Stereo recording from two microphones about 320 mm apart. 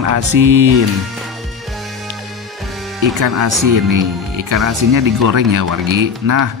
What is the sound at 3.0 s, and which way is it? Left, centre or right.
Music, right.